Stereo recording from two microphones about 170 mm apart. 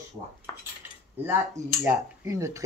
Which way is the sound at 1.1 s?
10° right (ahead or behind).